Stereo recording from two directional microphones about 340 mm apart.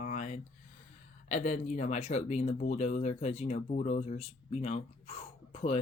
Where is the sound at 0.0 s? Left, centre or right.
Left.